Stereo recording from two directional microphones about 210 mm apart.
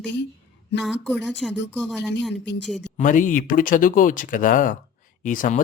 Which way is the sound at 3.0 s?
40° left (ahead or behind).